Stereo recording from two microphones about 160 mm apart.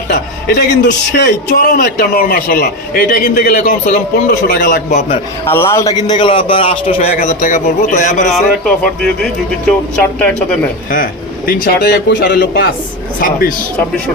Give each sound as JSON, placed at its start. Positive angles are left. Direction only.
{"t": 0.7, "sound": "a man's voice", "side_deg": 90}
{"t": 5.4, "sound": "a man's voice", "side_deg": 15}
{"t": 7.2, "sound": "a man's voice", "side_deg": 50}
{"t": 8.3, "sound": "a man's voice", "side_deg": 5}
{"t": 9.9, "sound": "speech", "side_deg": 5}
{"t": 10.9, "sound": "a man's voice", "side_deg": 60}
{"t": 13.2, "sound": "a woman's voice", "side_deg": 60}